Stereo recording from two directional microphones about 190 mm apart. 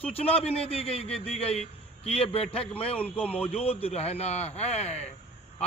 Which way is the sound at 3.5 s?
30° left (ahead or behind).